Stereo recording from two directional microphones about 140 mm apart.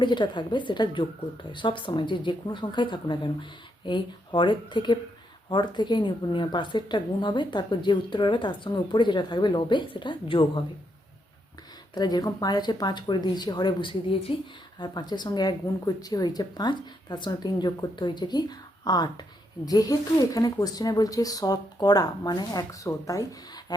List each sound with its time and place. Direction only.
0.0 s speech: 35° left (ahead or behind)
11.9 s a woman's voice: 30° left (ahead or behind)